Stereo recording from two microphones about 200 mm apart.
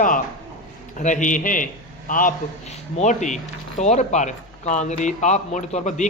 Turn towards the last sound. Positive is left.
turn(degrees=40)  # may be behind; listen again after turning